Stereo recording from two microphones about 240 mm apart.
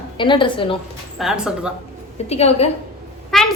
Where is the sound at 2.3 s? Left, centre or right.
Left.